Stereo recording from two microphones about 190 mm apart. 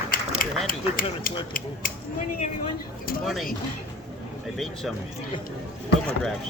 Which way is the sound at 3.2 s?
Centre (ahead or behind).